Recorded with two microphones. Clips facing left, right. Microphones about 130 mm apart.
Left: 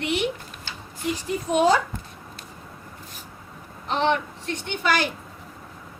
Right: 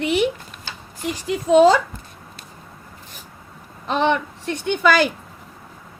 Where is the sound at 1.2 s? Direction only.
90° right.